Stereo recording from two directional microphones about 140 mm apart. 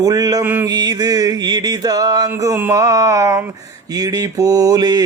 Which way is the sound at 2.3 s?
15° right (ahead or behind).